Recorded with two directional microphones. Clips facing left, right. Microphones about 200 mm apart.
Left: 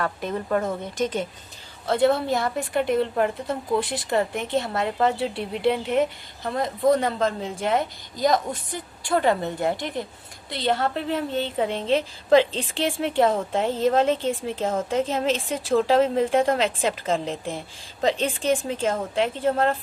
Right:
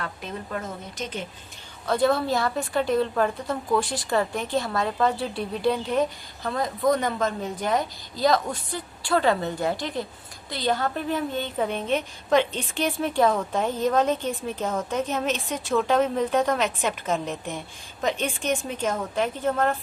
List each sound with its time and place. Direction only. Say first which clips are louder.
0.0 s speech: left 7 dB; 50° left (ahead or behind)
1.9 s a woman's voice: left 2 dB; 25° left (ahead or behind)